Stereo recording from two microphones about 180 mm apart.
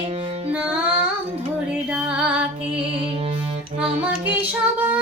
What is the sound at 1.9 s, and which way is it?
Music, 5° right (ahead or behind).